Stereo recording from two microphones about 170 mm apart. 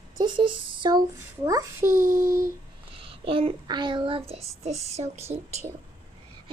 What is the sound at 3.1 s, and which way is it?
Child singing, 30° right (ahead or behind).